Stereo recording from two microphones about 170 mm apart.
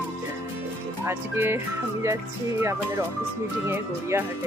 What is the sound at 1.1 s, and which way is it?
Speech, 15° right (ahead or behind).